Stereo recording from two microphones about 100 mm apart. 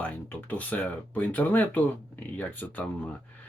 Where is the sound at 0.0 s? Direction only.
15° left (ahead or behind).